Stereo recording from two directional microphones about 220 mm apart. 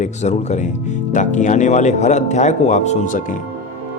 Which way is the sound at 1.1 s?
35° left (ahead or behind).